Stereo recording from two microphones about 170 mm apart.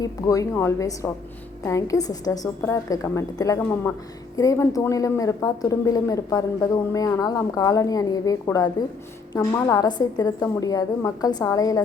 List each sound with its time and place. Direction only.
0.0 s a woman's voice: 20° left (ahead or behind)